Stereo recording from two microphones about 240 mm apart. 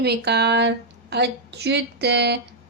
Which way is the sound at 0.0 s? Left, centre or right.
Right.